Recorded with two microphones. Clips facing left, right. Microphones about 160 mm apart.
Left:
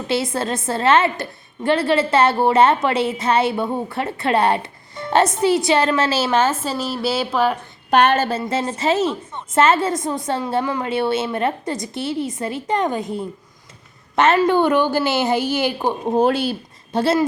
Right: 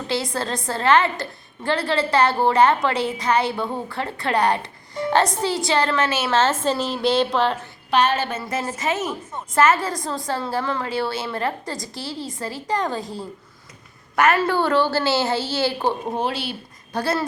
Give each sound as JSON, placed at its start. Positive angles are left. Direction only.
{"t": 0.1, "sound": "a woman's voice", "side_deg": 25}
{"t": 6.3, "sound": "a woman's voice", "side_deg": 10}
{"t": 7.9, "sound": "a woman's voice", "side_deg": 50}
{"t": 8.3, "sound": "a woman's voice", "side_deg": 30}
{"t": 16.1, "sound": "speech", "side_deg": 45}
{"t": 16.9, "sound": "a woman's voice", "side_deg": 25}